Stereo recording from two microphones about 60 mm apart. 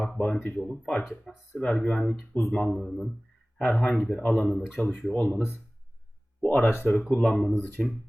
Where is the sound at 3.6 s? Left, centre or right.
Left.